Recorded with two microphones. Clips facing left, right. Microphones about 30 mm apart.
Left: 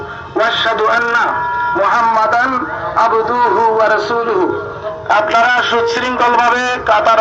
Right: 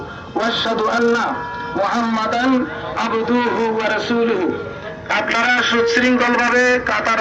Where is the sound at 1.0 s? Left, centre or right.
Left.